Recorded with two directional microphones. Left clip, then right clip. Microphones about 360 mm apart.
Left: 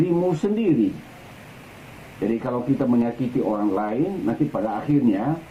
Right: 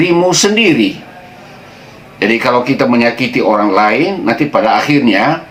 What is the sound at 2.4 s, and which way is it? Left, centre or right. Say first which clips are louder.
Speech: right 14 dB; centre.